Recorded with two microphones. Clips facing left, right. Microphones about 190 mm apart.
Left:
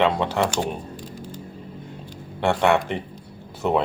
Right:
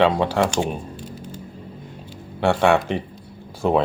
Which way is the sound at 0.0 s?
15° right (ahead or behind).